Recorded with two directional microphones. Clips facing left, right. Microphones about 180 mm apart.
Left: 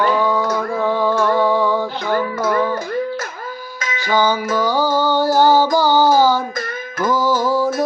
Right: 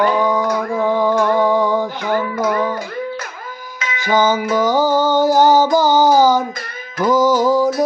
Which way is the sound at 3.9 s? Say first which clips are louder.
Right 2 dB; 20° right (ahead or behind).